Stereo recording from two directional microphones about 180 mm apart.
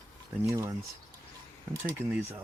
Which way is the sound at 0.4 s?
15° right (ahead or behind).